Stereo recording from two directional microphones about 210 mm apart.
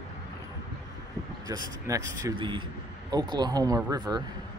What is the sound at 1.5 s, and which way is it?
Speech, 15° right (ahead or behind).